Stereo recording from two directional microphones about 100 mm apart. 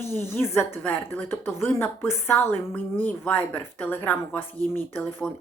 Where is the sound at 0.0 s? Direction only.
25° left (ahead or behind).